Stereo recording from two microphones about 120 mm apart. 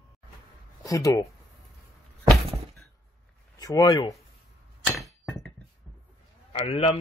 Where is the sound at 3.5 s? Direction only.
30° left (ahead or behind).